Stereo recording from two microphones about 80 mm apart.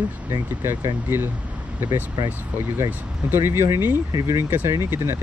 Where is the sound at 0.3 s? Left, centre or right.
Right.